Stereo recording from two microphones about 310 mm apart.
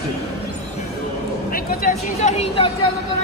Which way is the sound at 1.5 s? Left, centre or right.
Left.